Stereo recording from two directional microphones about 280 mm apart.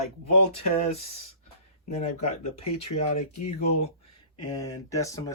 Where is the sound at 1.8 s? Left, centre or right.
Left.